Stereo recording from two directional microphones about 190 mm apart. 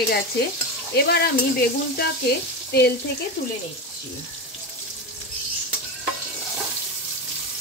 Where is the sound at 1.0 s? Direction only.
55° left (ahead or behind).